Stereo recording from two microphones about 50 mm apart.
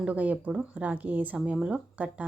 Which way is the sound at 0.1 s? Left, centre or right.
Right.